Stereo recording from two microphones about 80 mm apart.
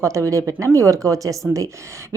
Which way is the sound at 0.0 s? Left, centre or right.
Right.